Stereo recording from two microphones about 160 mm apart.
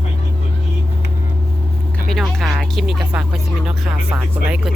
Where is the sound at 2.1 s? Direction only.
Centre (ahead or behind).